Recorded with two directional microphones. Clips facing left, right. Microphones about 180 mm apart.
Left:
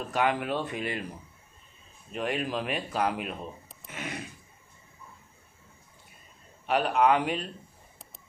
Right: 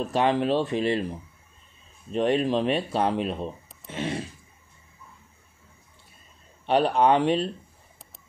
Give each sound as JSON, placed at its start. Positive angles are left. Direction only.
{"t": 0.0, "sound": "speech", "side_deg": -25}
{"t": 2.1, "sound": "speech", "side_deg": -30}
{"t": 6.6, "sound": "speech", "side_deg": -30}